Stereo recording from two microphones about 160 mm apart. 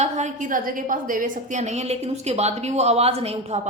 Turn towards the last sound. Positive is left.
turn(degrees=-40)  # may be behind; listen again after turning